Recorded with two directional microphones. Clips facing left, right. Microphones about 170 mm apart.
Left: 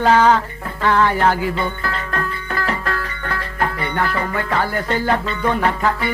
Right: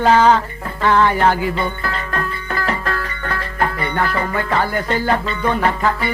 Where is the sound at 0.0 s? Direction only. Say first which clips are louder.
Right 1 dB; 20° right (ahead or behind).